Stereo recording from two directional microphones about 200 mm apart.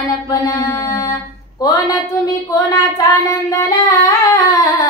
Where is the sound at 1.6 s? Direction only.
15° left (ahead or behind).